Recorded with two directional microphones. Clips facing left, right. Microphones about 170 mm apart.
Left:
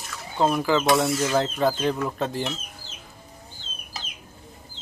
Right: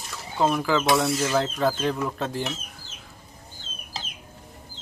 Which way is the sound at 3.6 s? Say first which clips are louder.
Even; 50° right (ahead or behind).